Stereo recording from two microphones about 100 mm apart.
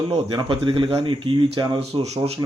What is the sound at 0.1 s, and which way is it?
Speech, 60° right (ahead or behind).